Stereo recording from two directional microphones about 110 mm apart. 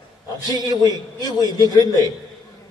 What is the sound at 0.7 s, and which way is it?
A man's voice, 35° left (ahead or behind).